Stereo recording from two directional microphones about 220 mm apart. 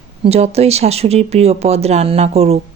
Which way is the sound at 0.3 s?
30° right (ahead or behind).